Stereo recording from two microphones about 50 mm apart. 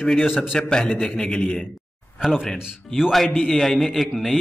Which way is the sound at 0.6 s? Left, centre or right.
Centre.